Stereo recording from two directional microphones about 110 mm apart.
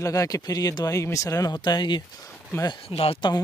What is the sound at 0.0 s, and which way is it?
Speech, 30° left (ahead or behind).